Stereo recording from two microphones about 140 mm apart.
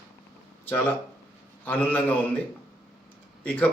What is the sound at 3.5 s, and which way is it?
Speech, 10° left (ahead or behind).